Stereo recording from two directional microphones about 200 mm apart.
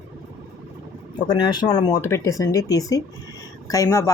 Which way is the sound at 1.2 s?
20° left (ahead or behind).